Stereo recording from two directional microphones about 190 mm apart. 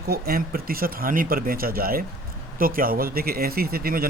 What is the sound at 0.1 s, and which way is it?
Speech, 50° right (ahead or behind).